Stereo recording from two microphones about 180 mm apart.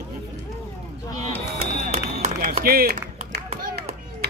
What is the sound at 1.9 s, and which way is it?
Speech, 45° right (ahead or behind).